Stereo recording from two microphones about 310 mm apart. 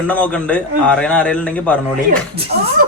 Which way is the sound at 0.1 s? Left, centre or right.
Centre.